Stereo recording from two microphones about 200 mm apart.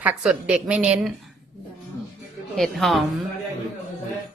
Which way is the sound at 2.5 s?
Centre (ahead or behind).